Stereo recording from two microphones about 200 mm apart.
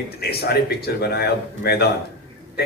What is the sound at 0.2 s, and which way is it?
Speech, 50° left (ahead or behind).